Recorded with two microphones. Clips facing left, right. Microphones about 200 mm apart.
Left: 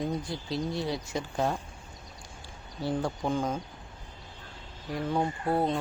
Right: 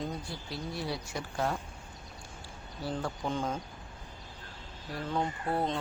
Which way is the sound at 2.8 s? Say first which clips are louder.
Left 5 dB; 15° left (ahead or behind).